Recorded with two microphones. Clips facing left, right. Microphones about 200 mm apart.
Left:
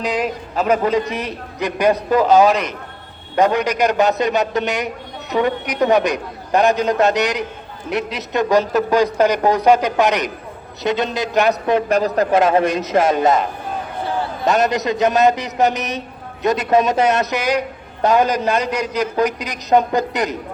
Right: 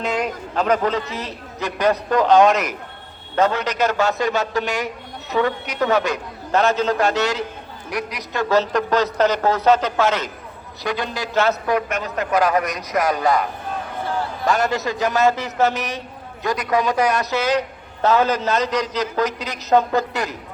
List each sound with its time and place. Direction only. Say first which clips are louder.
0.0 s a man's voice: left 2 dB; centre (ahead or behind)
3.3 s a man's voice: left 3 dB; 15° left (ahead or behind)
11.9 s a man's voice: left 7 dB; 35° left (ahead or behind); by 20.3 s 15° left (ahead or behind)